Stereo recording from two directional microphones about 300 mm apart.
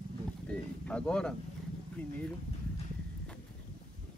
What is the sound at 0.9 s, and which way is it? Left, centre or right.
Speech, centre.